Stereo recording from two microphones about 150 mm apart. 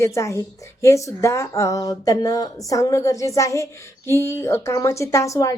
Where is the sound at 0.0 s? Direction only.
20° left (ahead or behind).